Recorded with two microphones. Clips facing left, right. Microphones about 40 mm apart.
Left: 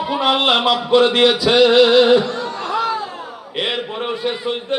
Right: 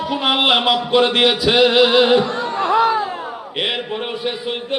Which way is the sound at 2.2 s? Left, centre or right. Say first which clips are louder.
Right 4 dB; right.